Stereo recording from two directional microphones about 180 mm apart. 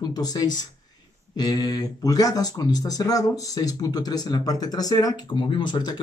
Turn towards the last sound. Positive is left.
turn(degrees=25)  # may be behind; listen again after turning